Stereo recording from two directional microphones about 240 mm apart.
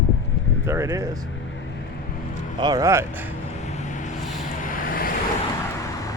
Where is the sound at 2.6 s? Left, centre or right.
Centre.